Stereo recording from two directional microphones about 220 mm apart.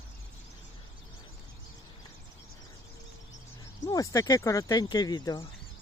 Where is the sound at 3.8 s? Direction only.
15° left (ahead or behind).